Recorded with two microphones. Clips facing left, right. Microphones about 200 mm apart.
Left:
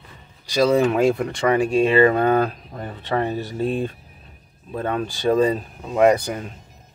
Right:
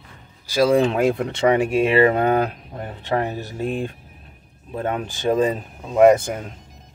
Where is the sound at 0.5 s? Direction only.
10° right (ahead or behind).